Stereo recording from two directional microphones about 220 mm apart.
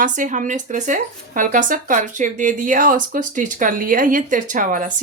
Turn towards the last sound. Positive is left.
turn(degrees=-40)  # may be behind; listen again after turning